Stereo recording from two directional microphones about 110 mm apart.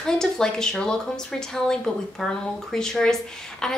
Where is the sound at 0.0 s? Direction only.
5° left (ahead or behind).